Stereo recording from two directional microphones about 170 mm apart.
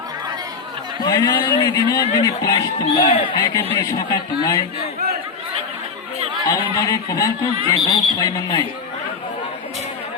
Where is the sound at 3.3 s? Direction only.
20° left (ahead or behind).